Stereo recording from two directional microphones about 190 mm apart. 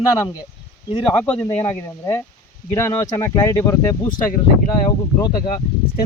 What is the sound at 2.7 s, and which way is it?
Speech, 15° left (ahead or behind).